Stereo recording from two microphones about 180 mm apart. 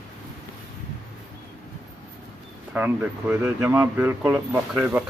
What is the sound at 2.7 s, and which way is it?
Speech, 10° right (ahead or behind).